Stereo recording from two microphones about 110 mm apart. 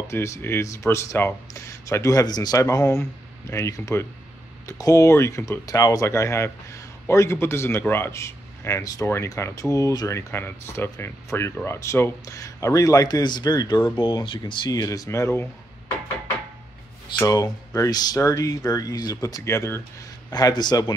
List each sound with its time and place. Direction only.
0.1 s speech: 25° left (ahead or behind)
14.0 s speech: 50° left (ahead or behind); by 15.4 s 25° left (ahead or behind)
17.3 s speech: 35° left (ahead or behind)
20.2 s speech: 40° left (ahead or behind)